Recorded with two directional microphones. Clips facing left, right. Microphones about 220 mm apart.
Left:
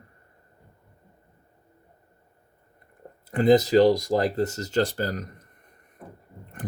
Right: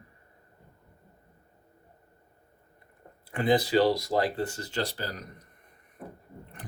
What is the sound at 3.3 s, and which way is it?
Speech, 45° left (ahead or behind).